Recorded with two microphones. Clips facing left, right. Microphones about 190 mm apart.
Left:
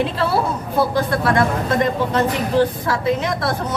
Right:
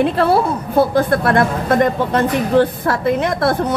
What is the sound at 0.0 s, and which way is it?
A man's voice, 55° right (ahead or behind).